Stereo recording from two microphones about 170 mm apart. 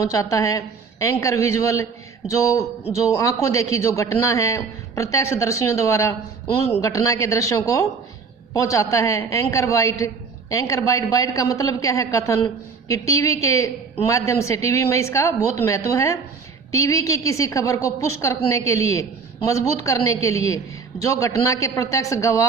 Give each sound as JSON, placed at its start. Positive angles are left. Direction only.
{"t": 0.0, "sound": "a man's voice", "side_deg": 20}